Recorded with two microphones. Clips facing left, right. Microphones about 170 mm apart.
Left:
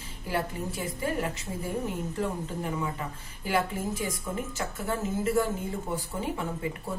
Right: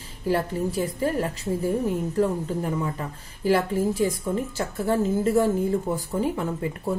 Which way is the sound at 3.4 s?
35° right (ahead or behind).